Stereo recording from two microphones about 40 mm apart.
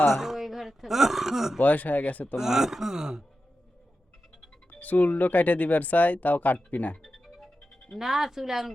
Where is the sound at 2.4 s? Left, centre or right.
Centre.